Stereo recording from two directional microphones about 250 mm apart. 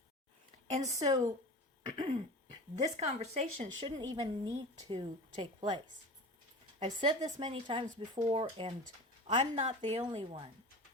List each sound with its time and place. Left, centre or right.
0.9 s speech: centre